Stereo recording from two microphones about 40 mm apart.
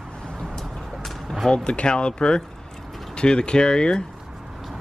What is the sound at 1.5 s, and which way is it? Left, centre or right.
Speech, left.